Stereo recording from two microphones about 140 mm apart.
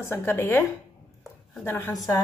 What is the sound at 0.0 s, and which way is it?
A woman's voice, 20° left (ahead or behind).